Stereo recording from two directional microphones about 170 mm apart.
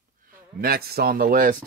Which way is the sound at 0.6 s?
65° right (ahead or behind).